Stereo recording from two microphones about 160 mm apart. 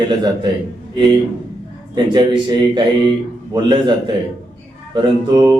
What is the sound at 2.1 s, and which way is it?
A man's voice, 30° right (ahead or behind).